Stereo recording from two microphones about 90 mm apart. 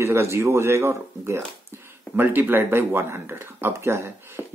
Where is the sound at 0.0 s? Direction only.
30° right (ahead or behind).